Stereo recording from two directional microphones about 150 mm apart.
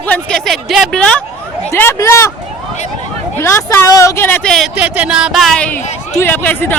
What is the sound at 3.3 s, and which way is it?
Speech, 15° left (ahead or behind).